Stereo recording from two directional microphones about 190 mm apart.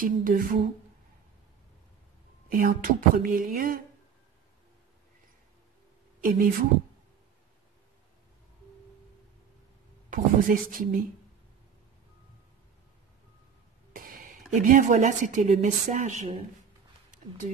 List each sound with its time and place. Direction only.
0.0 s speech: 45° right (ahead or behind)
2.5 s speech: 45° right (ahead or behind)
6.2 s speech: 45° right (ahead or behind)
10.0 s speech: 45° right (ahead or behind)
13.9 s speech: 45° right (ahead or behind)